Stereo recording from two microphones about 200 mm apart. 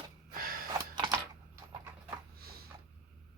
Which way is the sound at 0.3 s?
45° right (ahead or behind).